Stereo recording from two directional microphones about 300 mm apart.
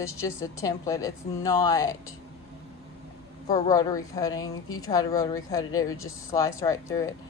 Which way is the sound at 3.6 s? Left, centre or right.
Centre.